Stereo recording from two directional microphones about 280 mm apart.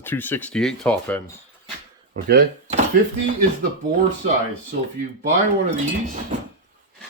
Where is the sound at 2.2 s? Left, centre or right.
Right.